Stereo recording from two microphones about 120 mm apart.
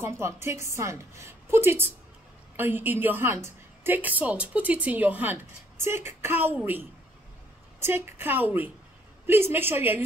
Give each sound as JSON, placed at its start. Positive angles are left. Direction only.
{"t": 0.0, "sound": "a woman's voice", "side_deg": -20}